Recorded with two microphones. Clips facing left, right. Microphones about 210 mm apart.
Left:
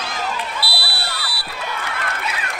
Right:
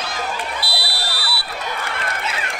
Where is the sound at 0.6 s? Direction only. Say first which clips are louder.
Even; 45° right (ahead or behind).